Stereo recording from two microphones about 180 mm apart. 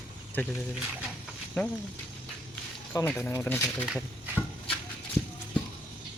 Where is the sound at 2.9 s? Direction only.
10° left (ahead or behind).